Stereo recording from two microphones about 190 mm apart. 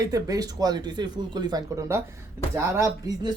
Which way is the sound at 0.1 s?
20° right (ahead or behind).